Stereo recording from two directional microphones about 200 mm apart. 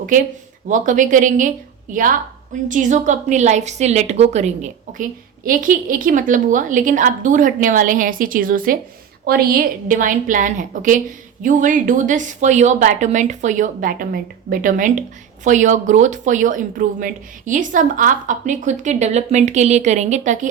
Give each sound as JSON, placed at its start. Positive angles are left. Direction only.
{"t": 0.7, "sound": "speech", "side_deg": -40}